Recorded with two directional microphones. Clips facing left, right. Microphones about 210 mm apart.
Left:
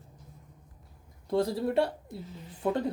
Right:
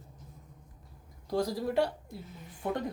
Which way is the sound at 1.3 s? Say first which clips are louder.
Left 3 dB; 25° left (ahead or behind).